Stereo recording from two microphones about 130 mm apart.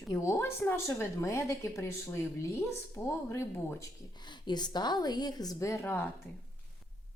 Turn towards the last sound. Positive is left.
turn(degrees=15)  # may be behind; listen again after turning